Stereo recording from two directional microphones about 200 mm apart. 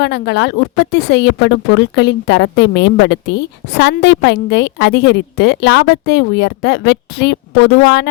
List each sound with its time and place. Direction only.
0.0 s speech: 60° left (ahead or behind)